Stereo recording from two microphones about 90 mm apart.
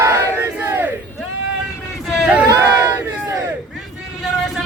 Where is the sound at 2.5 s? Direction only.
30° right (ahead or behind).